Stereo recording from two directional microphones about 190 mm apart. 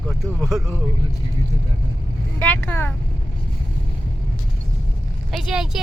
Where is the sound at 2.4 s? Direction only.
10° left (ahead or behind).